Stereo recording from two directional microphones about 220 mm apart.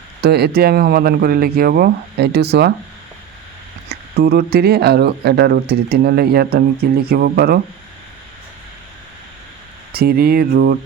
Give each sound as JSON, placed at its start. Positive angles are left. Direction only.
{"t": 0.2, "sound": "speech", "side_deg": -45}
{"t": 3.8, "sound": "speech", "side_deg": -45}
{"t": 9.9, "sound": "speech", "side_deg": -45}